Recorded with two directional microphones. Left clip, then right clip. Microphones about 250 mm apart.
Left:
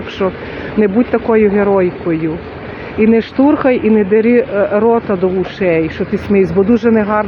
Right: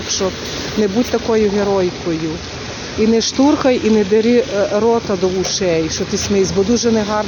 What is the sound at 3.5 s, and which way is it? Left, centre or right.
Speech, centre.